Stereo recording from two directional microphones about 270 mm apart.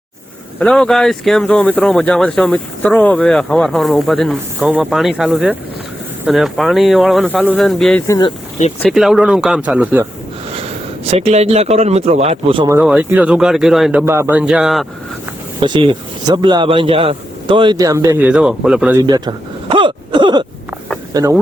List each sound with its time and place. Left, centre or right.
0.6 s speech: centre
8.8 s speech: centre
10.5 s a man's voice: right; by 14.8 s centre
15.6 s a man's voice: centre
19.0 s a man's voice: centre
19.7 s a sound: centre
21.1 s speech: centre